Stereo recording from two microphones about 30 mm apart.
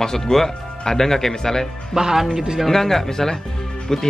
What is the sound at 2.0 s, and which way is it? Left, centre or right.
Speech, centre.